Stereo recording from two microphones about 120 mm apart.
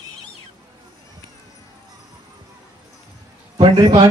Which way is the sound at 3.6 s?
35° right (ahead or behind).